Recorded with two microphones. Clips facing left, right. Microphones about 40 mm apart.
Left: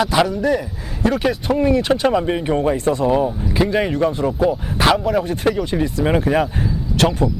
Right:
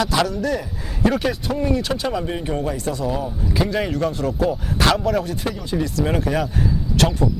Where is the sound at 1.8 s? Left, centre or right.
Left.